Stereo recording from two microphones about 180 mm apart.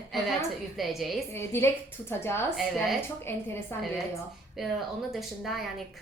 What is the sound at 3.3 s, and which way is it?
Speech, 15° left (ahead or behind).